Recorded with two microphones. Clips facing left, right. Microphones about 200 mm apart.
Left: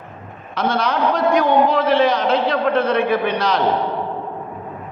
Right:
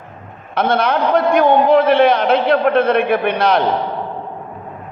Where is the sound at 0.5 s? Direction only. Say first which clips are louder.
Right 4 dB; 55° right (ahead or behind).